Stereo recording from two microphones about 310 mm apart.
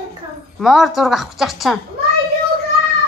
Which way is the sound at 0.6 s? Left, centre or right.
Centre.